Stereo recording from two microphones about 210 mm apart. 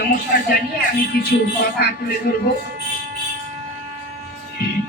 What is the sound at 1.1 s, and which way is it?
A man's voice, 50° left (ahead or behind).